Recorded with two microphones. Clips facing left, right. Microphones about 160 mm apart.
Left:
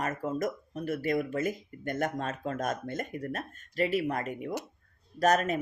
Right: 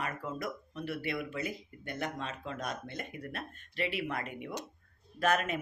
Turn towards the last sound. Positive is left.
turn(degrees=40)  # may be behind; listen again after turning